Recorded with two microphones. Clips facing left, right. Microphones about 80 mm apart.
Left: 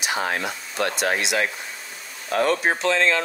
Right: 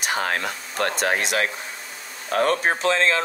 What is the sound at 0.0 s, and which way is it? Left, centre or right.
Speech, right.